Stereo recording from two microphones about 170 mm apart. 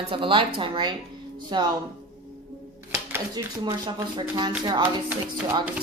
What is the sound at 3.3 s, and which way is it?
A woman's voice, 25° right (ahead or behind).